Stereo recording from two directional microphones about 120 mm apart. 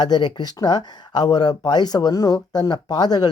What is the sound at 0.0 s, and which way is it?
Speech, 35° left (ahead or behind).